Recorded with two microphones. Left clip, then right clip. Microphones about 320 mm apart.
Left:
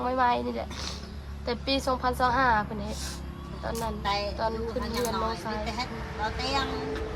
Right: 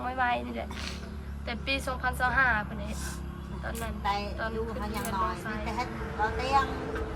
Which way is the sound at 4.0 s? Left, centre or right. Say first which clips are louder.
Even; right.